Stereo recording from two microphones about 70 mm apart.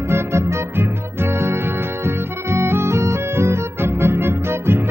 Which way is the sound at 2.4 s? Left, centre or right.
Right.